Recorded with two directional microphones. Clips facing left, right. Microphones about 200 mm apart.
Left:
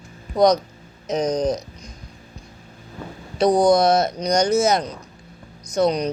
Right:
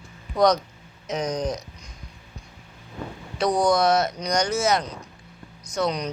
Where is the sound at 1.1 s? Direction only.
35° left (ahead or behind).